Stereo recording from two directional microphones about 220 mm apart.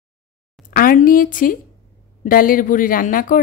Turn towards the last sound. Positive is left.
turn(degrees=35)  # may be behind; listen again after turning